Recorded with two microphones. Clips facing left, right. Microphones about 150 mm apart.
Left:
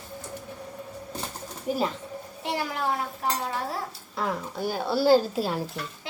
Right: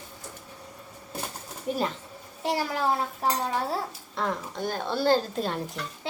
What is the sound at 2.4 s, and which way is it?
Speech, 35° right (ahead or behind).